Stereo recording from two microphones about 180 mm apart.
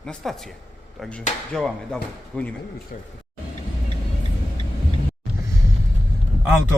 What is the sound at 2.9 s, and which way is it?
Speech, 50° left (ahead or behind).